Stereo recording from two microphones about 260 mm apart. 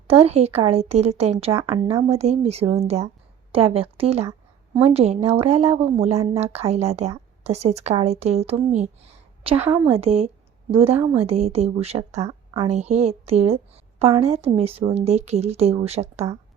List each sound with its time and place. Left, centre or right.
0.1 s a woman's voice: right
9.6 s a woman's voice: centre
10.0 s a woman's voice: right